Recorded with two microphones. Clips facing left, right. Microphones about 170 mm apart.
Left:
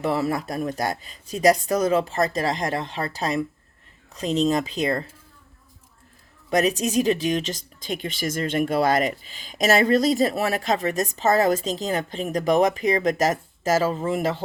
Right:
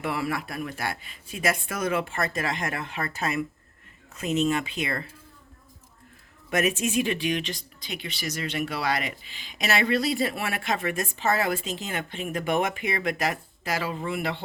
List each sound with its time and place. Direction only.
0.0 s speech: 35° left (ahead or behind)
6.5 s speech: 35° left (ahead or behind)